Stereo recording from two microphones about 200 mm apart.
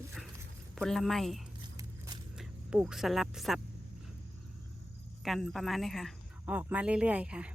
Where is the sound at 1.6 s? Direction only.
20° right (ahead or behind).